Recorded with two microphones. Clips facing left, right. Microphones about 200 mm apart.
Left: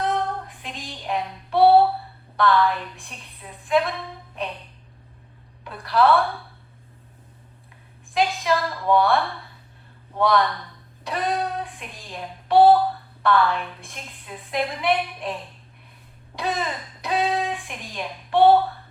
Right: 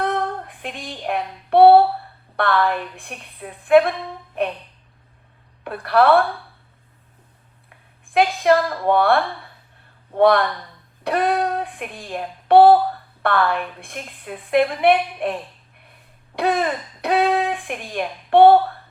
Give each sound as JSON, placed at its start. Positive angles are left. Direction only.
{"t": 0.0, "sound": "child singing", "side_deg": -55}
{"t": 2.3, "sound": "a woman's voice", "side_deg": -60}
{"t": 5.6, "sound": "a woman's voice", "side_deg": -60}
{"t": 8.1, "sound": "a woman's voice", "side_deg": -60}
{"t": 16.3, "sound": "speech", "side_deg": -60}